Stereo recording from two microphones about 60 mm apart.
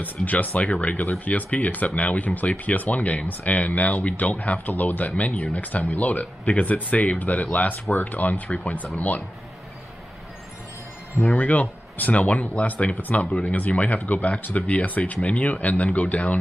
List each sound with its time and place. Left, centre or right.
0.0 s speech: left
11.1 s speech: left